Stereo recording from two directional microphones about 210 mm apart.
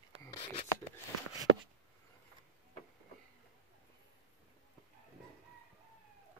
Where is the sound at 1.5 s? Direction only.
60° right (ahead or behind).